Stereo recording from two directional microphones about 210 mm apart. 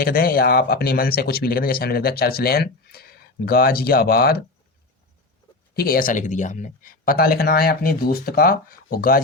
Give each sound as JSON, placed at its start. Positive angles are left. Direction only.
{"t": 0.0, "sound": "speech", "side_deg": 45}
{"t": 5.7, "sound": "speech", "side_deg": 45}